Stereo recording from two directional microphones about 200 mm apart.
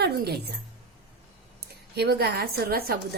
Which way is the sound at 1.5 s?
55° right (ahead or behind).